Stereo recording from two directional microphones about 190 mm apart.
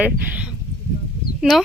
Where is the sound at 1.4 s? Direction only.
Centre (ahead or behind).